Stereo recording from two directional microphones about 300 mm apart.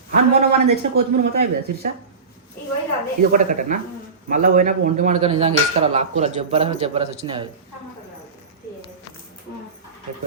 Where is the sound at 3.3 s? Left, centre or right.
Right.